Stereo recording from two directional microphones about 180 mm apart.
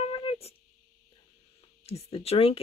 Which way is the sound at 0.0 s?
30° left (ahead or behind).